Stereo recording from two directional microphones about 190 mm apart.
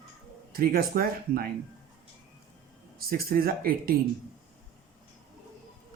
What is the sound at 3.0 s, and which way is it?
Speech, 50° right (ahead or behind).